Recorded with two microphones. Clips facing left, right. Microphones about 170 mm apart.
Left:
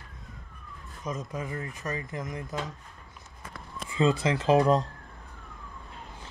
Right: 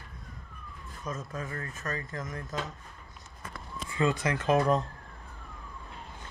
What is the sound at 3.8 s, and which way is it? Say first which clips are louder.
Speech: left 3 dB; 20° left (ahead or behind).